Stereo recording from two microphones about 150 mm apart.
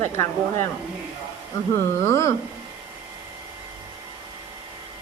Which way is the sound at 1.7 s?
20° left (ahead or behind).